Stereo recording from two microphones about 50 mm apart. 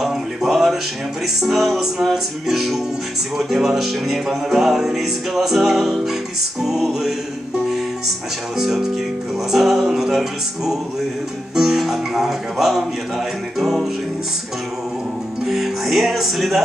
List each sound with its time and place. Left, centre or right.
0.0 s music: centre
8.5 s music: centre
15.4 s music: centre